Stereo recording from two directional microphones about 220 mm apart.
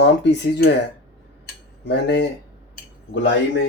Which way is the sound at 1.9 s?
50° left (ahead or behind).